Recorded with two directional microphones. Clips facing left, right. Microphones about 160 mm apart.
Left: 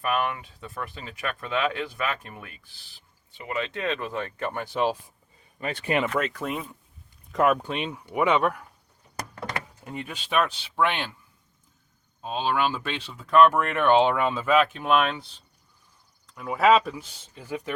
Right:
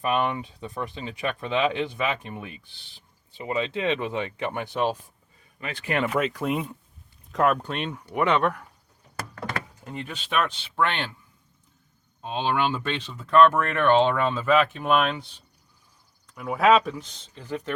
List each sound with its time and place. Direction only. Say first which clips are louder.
0.0 s speech: right 2 dB; 25° right (ahead or behind)
3.7 s speech: right 3 dB; 15° right (ahead or behind)
4.6 s speech: left 1 dB; centre (ahead or behind)
6.1 s speech: right 3 dB; 5° right (ahead or behind)
9.1 s vehicle: right 1 dB; 20° left (ahead or behind)
9.8 s speech: even; 5° left (ahead or behind)
12.2 s speech: even; 5° left (ahead or behind)
16.3 s speech: even; centre (ahead or behind)